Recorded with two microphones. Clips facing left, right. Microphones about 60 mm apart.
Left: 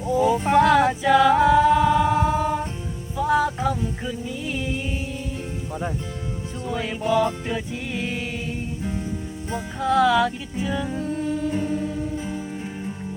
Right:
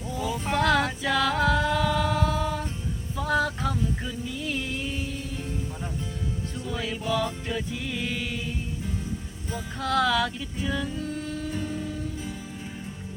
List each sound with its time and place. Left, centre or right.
0.2 s a sound: left
0.5 s a capella: centre
3.2 s music: centre
6.7 s music: left
9.7 s music: centre
11.0 s singing: left
12.1 s music: left